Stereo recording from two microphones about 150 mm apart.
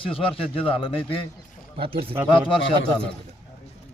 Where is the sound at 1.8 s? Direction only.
40° right (ahead or behind).